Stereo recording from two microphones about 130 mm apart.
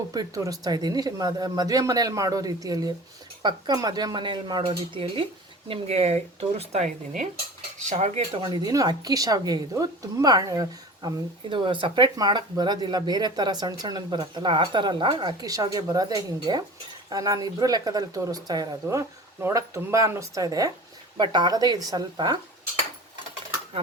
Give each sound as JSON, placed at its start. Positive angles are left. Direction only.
{"t": 0.1, "sound": "a woman's voice", "side_deg": -30}
{"t": 7.9, "sound": "cutlery", "side_deg": -60}
{"t": 8.4, "sound": "a woman's voice", "side_deg": -30}